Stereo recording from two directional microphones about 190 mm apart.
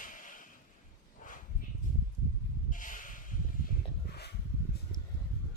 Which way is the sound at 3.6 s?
45° left (ahead or behind).